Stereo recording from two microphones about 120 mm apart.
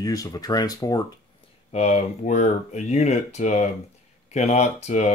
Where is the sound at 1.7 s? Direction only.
65° left (ahead or behind).